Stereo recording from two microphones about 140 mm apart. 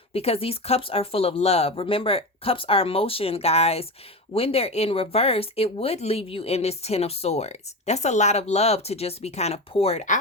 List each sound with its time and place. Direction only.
0.1 s speech: 45° left (ahead or behind)